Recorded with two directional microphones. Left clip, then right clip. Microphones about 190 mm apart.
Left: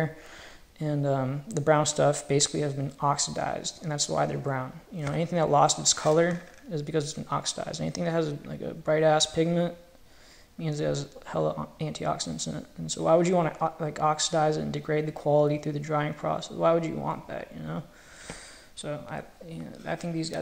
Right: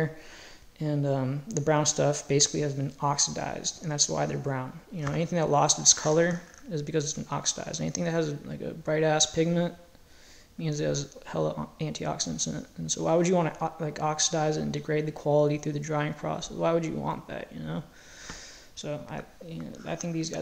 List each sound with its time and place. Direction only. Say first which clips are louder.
0.7 s speech: left 1 dB; 10° right (ahead or behind)